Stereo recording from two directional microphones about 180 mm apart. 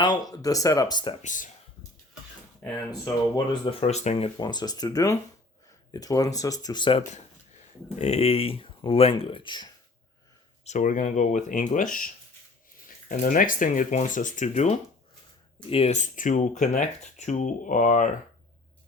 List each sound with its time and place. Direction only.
0.0 s speech: 20° left (ahead or behind)
1.2 s speech: 45° left (ahead or behind)
3.0 s speech: 25° left (ahead or behind)
4.4 s speech: 25° left (ahead or behind)
7.9 s speech: 35° left (ahead or behind)
10.6 s speech: 40° left (ahead or behind)